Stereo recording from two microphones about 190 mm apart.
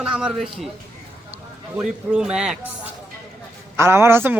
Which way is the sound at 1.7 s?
5° right (ahead or behind).